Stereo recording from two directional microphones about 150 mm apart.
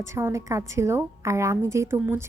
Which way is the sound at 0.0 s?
20° right (ahead or behind).